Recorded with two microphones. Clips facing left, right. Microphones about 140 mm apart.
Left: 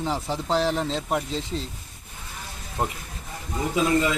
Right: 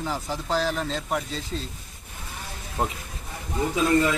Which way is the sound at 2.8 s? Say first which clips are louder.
Even; centre (ahead or behind).